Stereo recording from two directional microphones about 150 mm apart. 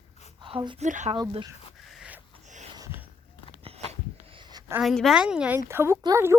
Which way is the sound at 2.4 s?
50° right (ahead or behind).